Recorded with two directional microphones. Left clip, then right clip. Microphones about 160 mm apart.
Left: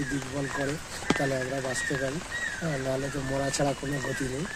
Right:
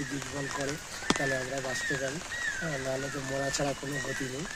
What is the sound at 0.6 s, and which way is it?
Speech, 20° right (ahead or behind).